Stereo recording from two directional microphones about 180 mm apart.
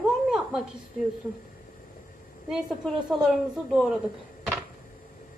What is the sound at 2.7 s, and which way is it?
A woman's voice, centre (ahead or behind).